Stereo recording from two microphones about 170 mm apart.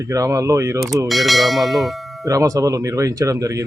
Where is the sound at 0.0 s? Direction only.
20° right (ahead or behind).